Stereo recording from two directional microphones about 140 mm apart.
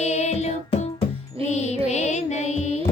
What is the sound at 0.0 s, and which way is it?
Music, 50° left (ahead or behind).